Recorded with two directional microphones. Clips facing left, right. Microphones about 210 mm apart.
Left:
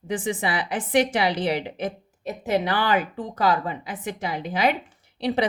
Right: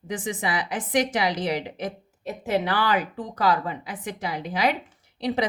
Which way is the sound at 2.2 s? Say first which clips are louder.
Left 1 dB; 15° left (ahead or behind).